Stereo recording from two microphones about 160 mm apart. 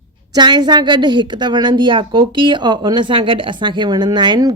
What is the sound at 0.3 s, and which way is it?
A woman's voice, 25° right (ahead or behind).